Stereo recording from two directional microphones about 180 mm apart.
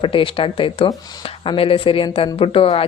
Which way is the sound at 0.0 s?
30° left (ahead or behind).